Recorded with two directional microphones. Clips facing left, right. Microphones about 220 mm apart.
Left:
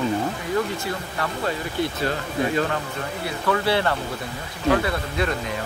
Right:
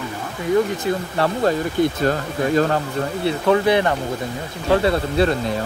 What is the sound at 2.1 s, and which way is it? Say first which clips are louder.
Speech: right 4 dB; 40° right (ahead or behind).